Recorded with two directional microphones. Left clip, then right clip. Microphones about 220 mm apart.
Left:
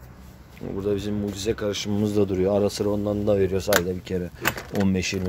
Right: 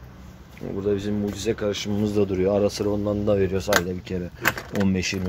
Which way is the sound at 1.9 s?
30° left (ahead or behind).